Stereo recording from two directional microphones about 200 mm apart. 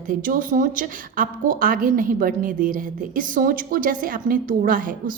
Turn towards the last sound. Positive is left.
turn(degrees=-45)  # may be behind; listen again after turning